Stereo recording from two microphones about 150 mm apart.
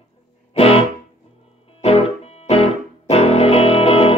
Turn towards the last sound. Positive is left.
turn(degrees=40)  # may be behind; listen again after turning